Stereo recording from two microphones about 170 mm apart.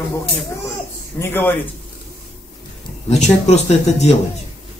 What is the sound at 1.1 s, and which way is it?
Speech, 15° left (ahead or behind).